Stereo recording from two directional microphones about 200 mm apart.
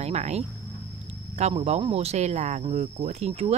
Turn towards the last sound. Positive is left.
turn(degrees=-30)  # may be behind; listen again after turning